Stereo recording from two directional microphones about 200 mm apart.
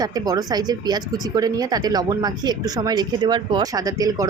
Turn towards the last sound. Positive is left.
turn(degrees=-15)  # may be behind; listen again after turning